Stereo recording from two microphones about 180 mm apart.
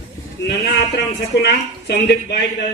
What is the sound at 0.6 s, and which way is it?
A man's voice, 65° left (ahead or behind).